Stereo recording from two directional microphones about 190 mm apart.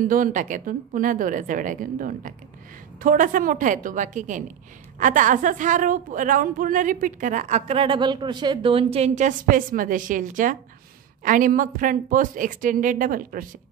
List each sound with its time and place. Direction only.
0.0 s a woman's voice: 45° right (ahead or behind)